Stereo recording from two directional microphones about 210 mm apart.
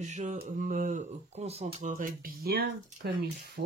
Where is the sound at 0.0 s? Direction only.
35° right (ahead or behind).